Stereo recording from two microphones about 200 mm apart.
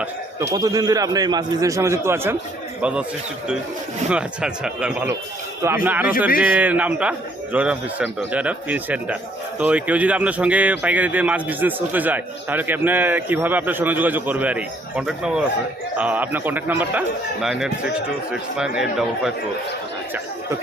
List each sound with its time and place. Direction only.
0.5 s a man's voice: 20° right (ahead or behind)
4.1 s a man's voice: 5° right (ahead or behind)